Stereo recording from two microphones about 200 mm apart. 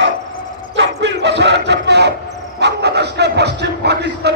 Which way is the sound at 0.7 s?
60° right (ahead or behind).